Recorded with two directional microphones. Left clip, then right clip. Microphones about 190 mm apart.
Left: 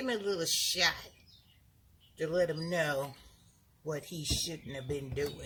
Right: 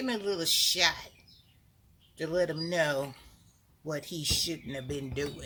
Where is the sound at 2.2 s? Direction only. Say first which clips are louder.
Right 1 dB; 30° right (ahead or behind).